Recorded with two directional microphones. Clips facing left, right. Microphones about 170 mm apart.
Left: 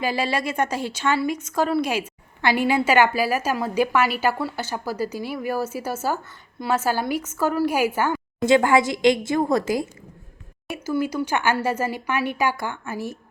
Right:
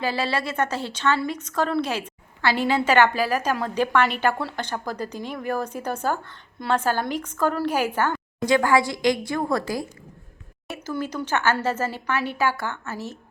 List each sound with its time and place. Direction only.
0.0 s a woman's voice: 15° left (ahead or behind)
8.4 s a woman's voice: 20° left (ahead or behind)
10.8 s a woman's voice: 10° left (ahead or behind)